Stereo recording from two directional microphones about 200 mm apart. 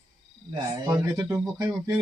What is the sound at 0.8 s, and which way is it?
Speech, 15° right (ahead or behind).